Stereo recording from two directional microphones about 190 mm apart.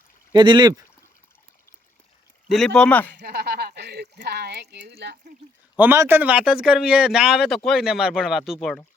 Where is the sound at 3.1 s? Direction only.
60° right (ahead or behind).